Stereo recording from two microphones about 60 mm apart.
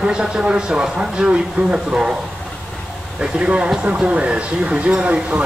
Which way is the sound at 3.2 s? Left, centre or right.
Centre.